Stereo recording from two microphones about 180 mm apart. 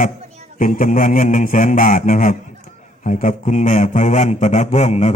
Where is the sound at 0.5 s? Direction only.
50° left (ahead or behind).